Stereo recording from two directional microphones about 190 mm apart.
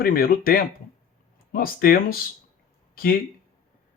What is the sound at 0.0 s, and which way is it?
Speech, 50° left (ahead or behind).